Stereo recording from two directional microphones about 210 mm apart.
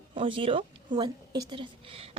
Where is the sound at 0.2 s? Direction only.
25° right (ahead or behind).